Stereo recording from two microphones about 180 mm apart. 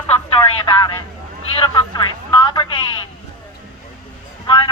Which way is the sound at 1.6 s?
25° left (ahead or behind).